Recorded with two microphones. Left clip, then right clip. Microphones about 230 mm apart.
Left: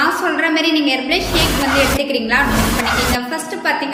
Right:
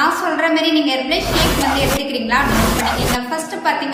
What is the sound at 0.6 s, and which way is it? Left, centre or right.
Speech, right.